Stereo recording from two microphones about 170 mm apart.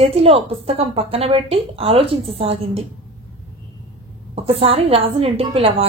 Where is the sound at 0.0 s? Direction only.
35° right (ahead or behind).